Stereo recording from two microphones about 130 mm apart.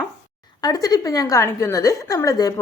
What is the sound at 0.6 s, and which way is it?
A woman's voice, 30° left (ahead or behind).